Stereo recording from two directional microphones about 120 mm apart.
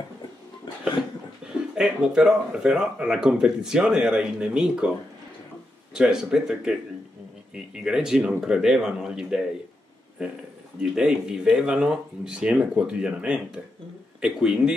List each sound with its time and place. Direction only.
1.4 s speech: 5° right (ahead or behind)
5.9 s speech: 5° right (ahead or behind)